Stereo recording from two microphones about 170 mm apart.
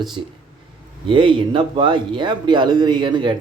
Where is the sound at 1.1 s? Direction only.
30° right (ahead or behind).